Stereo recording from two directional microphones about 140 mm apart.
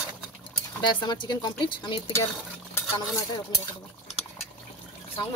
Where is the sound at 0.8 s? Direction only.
35° left (ahead or behind).